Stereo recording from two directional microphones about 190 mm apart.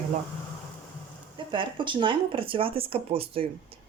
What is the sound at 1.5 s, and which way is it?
Speech, 25° right (ahead or behind).